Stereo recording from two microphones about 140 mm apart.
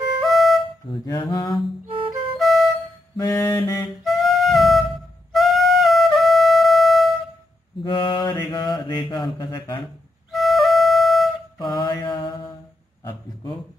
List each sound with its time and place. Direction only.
0.2 s music: centre (ahead or behind)
1.1 s mantra: 30° left (ahead or behind)
2.3 s music: centre (ahead or behind)
3.2 s mantra: 25° left (ahead or behind)
4.0 s music: centre (ahead or behind)
7.9 s mantra: 35° left (ahead or behind)
10.3 s flute: centre (ahead or behind)
11.5 s mantra: 30° left (ahead or behind)